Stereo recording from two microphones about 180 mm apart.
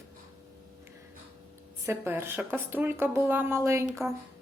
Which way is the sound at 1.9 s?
15° right (ahead or behind).